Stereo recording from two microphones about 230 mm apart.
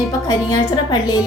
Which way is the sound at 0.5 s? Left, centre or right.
Centre.